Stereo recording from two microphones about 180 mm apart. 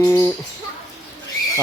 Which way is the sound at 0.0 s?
15° left (ahead or behind).